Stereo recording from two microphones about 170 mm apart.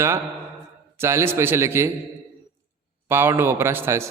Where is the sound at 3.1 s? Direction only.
15° right (ahead or behind).